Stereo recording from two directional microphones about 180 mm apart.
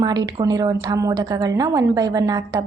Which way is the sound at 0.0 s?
20° right (ahead or behind).